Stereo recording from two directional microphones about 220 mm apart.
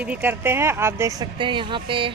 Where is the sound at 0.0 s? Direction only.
5° right (ahead or behind).